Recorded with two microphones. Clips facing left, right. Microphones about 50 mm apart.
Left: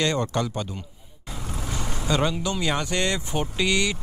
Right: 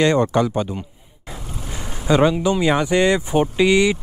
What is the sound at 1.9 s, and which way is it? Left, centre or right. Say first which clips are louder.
Speech: right 9 dB; centre.